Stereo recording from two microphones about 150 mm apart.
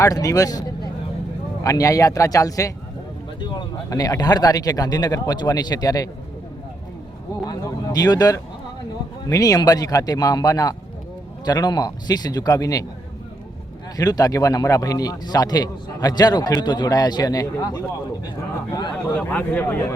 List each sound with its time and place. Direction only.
0.0 s speech: 25° left (ahead or behind)
1.6 s speech: 20° left (ahead or behind)
7.4 s speech: 25° left (ahead or behind)
13.9 s speech: 25° left (ahead or behind)
19.1 s speech: 10° left (ahead or behind)